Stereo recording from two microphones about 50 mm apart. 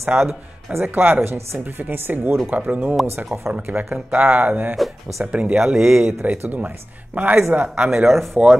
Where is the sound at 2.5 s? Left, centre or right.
Right.